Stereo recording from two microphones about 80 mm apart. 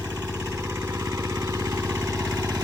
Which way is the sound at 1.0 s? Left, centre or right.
Right.